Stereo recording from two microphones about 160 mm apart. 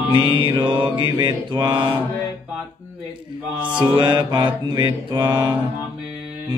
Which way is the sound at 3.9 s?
30° right (ahead or behind).